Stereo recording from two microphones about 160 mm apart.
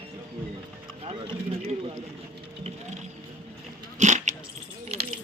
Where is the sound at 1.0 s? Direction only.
40° right (ahead or behind).